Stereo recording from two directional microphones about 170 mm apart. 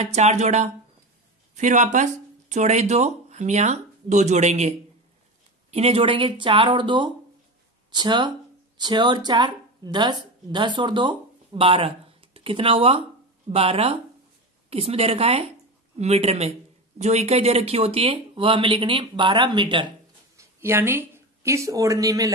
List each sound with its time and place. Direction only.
0.0 s speech: 40° right (ahead or behind)
20.3 s speech: 15° right (ahead or behind)